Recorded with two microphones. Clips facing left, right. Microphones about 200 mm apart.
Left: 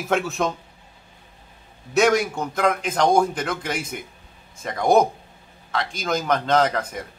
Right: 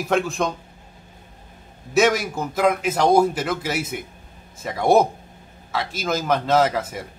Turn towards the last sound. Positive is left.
turn(degrees=-5)  # may be behind; listen again after turning